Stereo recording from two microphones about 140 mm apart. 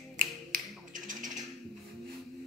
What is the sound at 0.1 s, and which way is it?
Finger snapping, 75° right (ahead or behind).